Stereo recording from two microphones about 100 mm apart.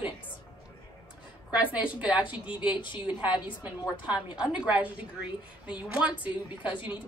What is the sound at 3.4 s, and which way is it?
A woman's voice, 15° right (ahead or behind).